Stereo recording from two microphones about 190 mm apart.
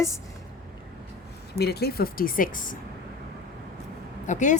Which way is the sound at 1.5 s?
60° left (ahead or behind).